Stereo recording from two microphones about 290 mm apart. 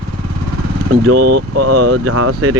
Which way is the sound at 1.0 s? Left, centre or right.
Right.